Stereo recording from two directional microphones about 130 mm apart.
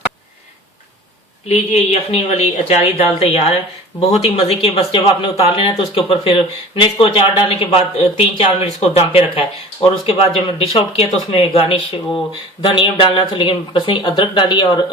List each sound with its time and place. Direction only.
1.5 s speech: 55° left (ahead or behind); by 14.9 s 35° left (ahead or behind)